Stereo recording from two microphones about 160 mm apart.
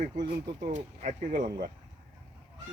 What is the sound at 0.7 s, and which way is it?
Speech, 50° right (ahead or behind).